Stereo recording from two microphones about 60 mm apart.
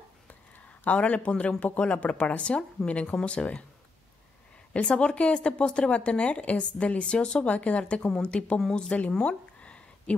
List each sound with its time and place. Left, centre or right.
0.8 s speech: left
4.7 s speech: centre
9.2 s a sound: centre